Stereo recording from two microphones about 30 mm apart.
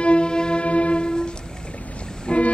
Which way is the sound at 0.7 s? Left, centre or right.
Left.